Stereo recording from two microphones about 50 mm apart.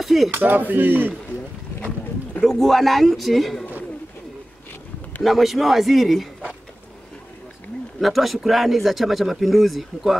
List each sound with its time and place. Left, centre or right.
0.0 s cutlery: centre
0.3 s speech: right
2.4 s speech: centre
5.2 s speech: centre
8.0 s speech: centre